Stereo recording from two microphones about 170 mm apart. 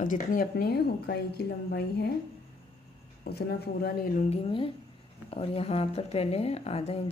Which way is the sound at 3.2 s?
65° left (ahead or behind).